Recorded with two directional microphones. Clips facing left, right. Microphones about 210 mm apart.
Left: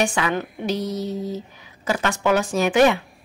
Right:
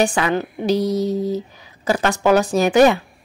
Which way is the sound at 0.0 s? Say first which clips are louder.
Right 4 dB; 35° right (ahead or behind).